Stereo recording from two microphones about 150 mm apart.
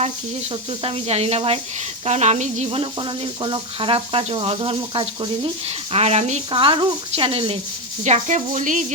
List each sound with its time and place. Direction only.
0.8 s speech: 40° right (ahead or behind)
6.5 s speech: 35° right (ahead or behind)
8.0 s speech: 50° right (ahead or behind)